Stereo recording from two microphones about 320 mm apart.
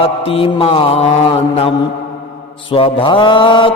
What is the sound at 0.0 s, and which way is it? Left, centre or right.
Mantra, centre.